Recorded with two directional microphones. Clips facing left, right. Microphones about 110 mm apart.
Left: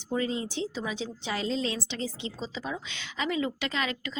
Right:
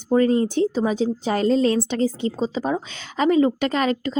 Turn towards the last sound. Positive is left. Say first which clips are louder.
# right 11 dB
turn(degrees=-45)  # may be behind; listen again after turning